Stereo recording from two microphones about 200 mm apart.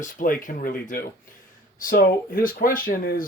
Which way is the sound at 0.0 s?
40° left (ahead or behind).